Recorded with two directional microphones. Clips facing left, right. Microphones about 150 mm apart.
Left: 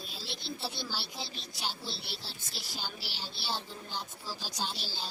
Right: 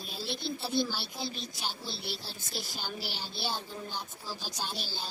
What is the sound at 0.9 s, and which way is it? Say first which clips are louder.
Speech: right 2 dB; 5° left (ahead or behind).